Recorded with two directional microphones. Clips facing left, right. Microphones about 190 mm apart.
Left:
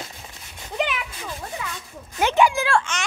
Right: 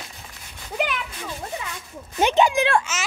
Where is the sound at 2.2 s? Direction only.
20° right (ahead or behind).